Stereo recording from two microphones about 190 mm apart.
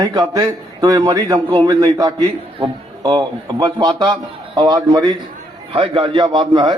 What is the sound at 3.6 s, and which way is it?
A man's voice, 20° right (ahead or behind).